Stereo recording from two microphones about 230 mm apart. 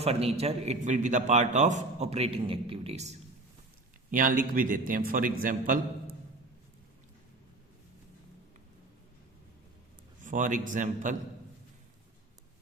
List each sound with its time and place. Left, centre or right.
0.0 s a man's voice: right
10.2 s a man's voice: right